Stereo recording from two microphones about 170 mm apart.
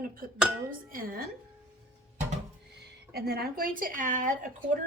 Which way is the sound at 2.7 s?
65° right (ahead or behind).